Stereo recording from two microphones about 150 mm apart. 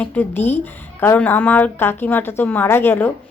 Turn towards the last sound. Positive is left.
turn(degrees=15)  # may be behind; listen again after turning